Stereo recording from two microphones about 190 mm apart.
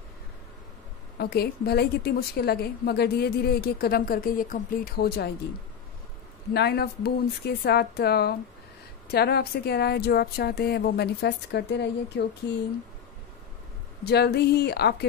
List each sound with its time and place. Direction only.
1.1 s a woman's voice: 55° left (ahead or behind)
6.5 s a woman's voice: 60° left (ahead or behind)
14.0 s a woman's voice: 60° left (ahead or behind)